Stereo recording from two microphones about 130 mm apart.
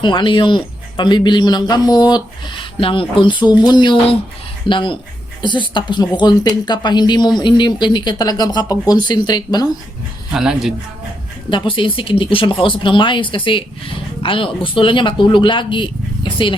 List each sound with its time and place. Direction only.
0.0 s speech: 40° left (ahead or behind)
10.3 s speech: 5° right (ahead or behind)
11.4 s speech: 40° left (ahead or behind)